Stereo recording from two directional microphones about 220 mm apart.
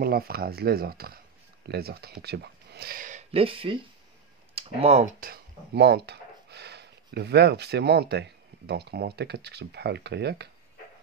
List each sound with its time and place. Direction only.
0.0 s speech: 45° right (ahead or behind)